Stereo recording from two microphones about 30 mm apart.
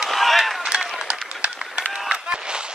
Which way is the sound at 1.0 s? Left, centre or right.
Right.